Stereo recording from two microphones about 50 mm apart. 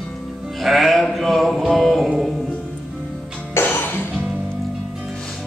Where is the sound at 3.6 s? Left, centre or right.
Left.